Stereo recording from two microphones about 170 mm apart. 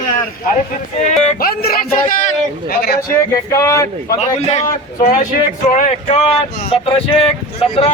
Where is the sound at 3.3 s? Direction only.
20° left (ahead or behind).